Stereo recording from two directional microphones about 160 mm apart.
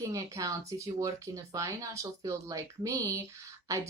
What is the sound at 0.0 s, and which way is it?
Speech, 20° right (ahead or behind).